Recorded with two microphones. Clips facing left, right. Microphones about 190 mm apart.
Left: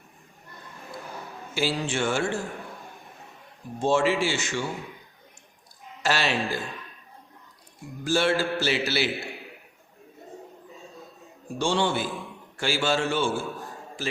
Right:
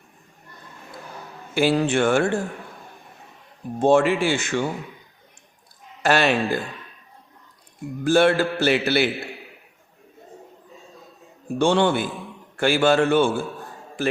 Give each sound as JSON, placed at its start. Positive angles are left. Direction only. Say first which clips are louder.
{"t": 1.5, "sound": "mantra", "louder": "right 8 dB", "side_deg": -55}
{"t": 3.8, "sound": "mantra", "louder": "right 5 dB", "side_deg": -55}
{"t": 6.0, "sound": "mantra", "louder": "right 6 dB", "side_deg": -55}
{"t": 8.0, "sound": "mantra", "louder": "right 6 dB", "side_deg": -55}
{"t": 11.5, "sound": "mantra", "louder": "right 6 dB", "side_deg": -60}
{"t": 14.0, "sound": "a man's voice", "louder": "right 9 dB", "side_deg": -60}